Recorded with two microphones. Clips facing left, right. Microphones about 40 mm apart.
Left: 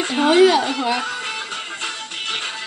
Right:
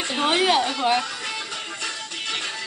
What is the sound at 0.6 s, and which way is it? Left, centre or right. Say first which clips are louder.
Speech: left 3 dB; left.